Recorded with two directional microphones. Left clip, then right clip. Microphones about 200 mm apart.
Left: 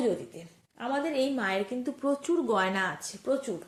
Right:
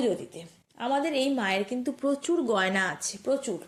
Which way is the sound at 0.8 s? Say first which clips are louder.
Right 2 dB; 35° right (ahead or behind).